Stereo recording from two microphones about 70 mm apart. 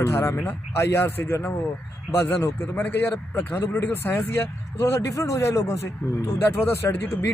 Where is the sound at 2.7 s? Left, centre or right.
Left.